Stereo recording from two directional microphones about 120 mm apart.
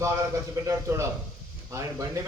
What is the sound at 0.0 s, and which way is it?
A man's voice, 25° right (ahead or behind).